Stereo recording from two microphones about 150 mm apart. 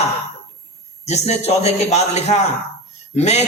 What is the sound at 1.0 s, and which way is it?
Speech, 45° left (ahead or behind).